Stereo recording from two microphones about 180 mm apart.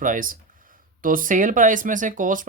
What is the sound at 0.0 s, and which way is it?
Speech, 50° right (ahead or behind).